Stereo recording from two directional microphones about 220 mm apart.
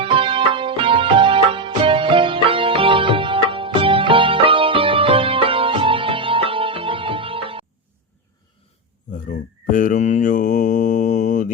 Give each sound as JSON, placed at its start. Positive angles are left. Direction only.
{"t": 0.0, "sound": "music", "side_deg": -25}
{"t": 9.1, "sound": "mantra", "side_deg": 35}